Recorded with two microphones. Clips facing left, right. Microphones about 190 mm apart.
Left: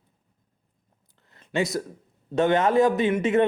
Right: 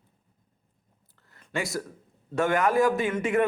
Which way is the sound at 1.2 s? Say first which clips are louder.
Left 6 dB; 20° left (ahead or behind).